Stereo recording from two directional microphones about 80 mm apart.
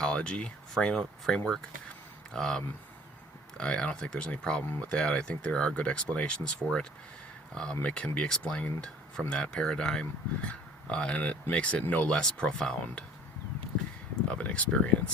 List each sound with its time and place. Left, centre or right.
0.0 s speech: centre
14.3 s speech: centre